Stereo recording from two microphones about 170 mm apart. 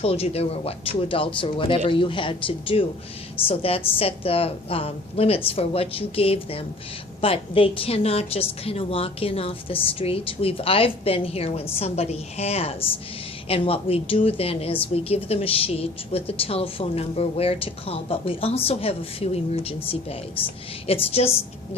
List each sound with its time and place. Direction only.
0.0 s speech: 35° left (ahead or behind)